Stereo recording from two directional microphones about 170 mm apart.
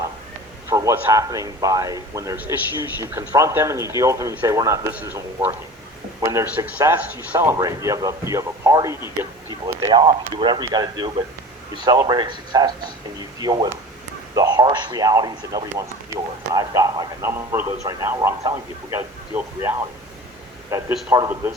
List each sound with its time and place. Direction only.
0.7 s a man's voice: 15° right (ahead or behind)